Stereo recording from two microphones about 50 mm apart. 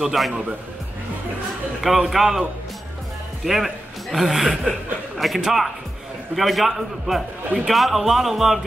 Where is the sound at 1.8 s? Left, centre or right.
Centre.